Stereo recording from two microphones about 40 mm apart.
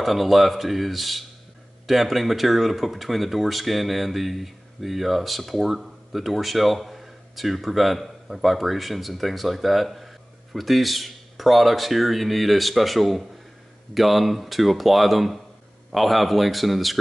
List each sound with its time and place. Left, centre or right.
0.0 s speech: centre